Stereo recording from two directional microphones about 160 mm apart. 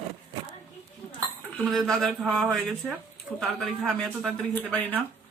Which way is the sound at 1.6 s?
5° left (ahead or behind).